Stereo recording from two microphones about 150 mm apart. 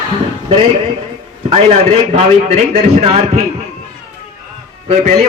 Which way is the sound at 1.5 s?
45° right (ahead or behind).